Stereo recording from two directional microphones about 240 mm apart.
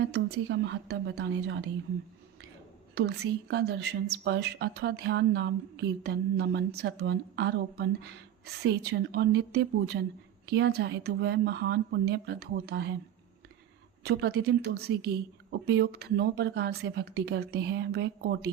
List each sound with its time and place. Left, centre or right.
0.0 s a woman's voice: right
2.9 s a woman's voice: right
14.0 s a woman's voice: right